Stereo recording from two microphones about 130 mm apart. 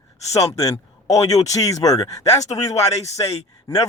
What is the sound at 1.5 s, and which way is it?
Speech, 25° left (ahead or behind).